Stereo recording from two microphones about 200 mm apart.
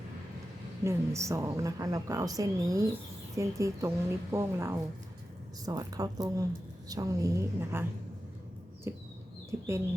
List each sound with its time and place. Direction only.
0.9 s a woman's voice: 15° right (ahead or behind)
8.9 s a woman's voice: 15° right (ahead or behind)